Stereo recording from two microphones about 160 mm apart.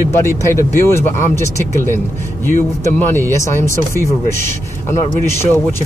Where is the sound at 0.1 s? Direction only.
15° left (ahead or behind).